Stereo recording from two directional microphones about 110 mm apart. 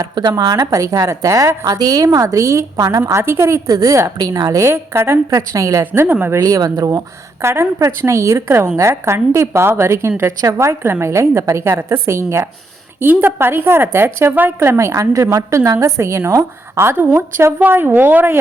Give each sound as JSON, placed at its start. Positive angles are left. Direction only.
{"t": 0.0, "sound": "a woman's voice", "side_deg": -40}
{"t": 5.8, "sound": "a woman's voice", "side_deg": -20}
{"t": 6.4, "sound": "a woman's voice", "side_deg": -30}